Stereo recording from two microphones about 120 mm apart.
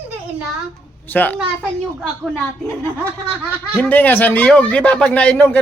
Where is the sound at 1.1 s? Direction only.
15° left (ahead or behind).